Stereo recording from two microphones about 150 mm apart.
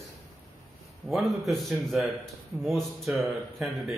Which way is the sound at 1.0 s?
Centre (ahead or behind).